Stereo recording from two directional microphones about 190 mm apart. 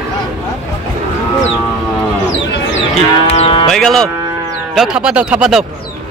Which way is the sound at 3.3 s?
30° left (ahead or behind).